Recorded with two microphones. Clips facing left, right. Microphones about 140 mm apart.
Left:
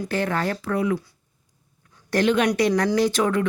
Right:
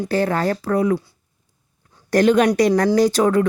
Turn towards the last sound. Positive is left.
turn(degrees=-40)  # may be behind; listen again after turning